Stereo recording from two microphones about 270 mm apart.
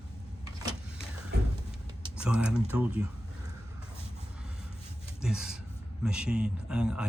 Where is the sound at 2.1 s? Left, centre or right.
Centre.